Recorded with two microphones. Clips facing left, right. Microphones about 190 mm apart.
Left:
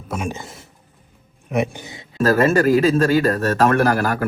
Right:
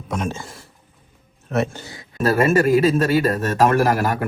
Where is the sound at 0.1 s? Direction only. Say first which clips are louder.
Right 1 dB; 10° left (ahead or behind).